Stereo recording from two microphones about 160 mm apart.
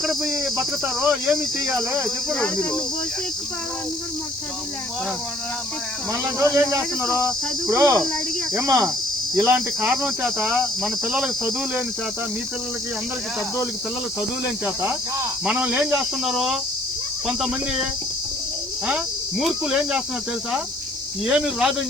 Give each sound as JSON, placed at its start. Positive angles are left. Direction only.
{"t": 0.0, "sound": "speech", "side_deg": 0}
{"t": 6.4, "sound": "speech", "side_deg": -20}
{"t": 7.7, "sound": "cricket", "side_deg": -20}
{"t": 9.3, "sound": "speech", "side_deg": -15}
{"t": 9.8, "sound": "speech", "side_deg": -5}
{"t": 14.6, "sound": "speech", "side_deg": -15}
{"t": 18.9, "sound": "speech", "side_deg": -5}
{"t": 21.2, "sound": "speech", "side_deg": -5}